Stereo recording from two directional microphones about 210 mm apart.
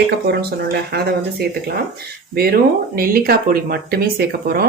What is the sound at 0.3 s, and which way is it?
Speech, 50° right (ahead or behind).